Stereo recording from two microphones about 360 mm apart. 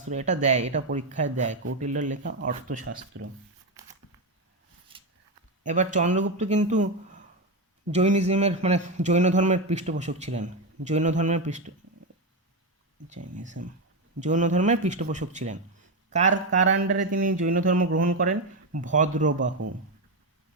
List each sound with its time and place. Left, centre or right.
0.0 s a man's voice: centre
4.9 s a sound: centre
5.6 s a man's voice: centre
14.2 s a man's voice: centre